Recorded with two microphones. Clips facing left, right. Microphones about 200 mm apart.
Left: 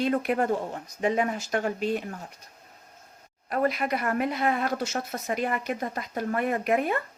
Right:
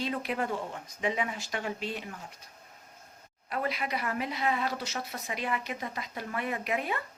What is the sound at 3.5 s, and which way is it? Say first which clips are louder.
Speech: left 7 dB; 50° left (ahead or behind).